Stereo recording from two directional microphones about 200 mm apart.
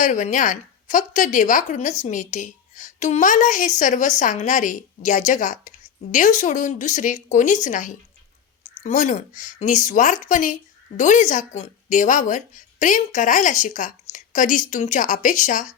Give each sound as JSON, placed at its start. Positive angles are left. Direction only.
{"t": 0.0, "sound": "a woman's voice", "side_deg": 40}